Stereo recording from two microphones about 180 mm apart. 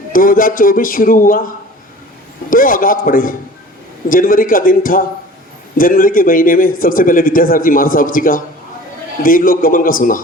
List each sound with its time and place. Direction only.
0.1 s speech: 50° left (ahead or behind)
2.5 s speech: 50° left (ahead or behind)